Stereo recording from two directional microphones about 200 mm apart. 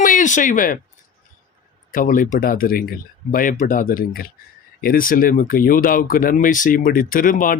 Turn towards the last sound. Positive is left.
turn(degrees=45)  # may be behind; listen again after turning